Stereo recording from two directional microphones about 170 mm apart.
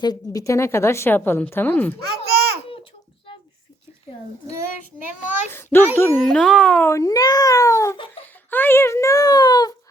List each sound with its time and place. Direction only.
0.0 s a woman's voice: 20° left (ahead or behind)
2.0 s a child's voice: 70° right (ahead or behind)
5.5 s a woman's voice: 15° left (ahead or behind)
6.8 s a child's voice: 20° left (ahead or behind)
7.9 s a sound: 30° left (ahead or behind)
8.4 s a woman's voice: 10° left (ahead or behind)